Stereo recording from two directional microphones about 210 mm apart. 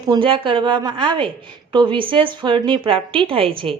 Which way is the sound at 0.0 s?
20° right (ahead or behind).